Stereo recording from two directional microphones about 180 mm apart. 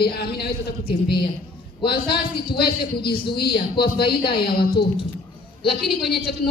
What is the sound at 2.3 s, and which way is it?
Speech, 60° left (ahead or behind).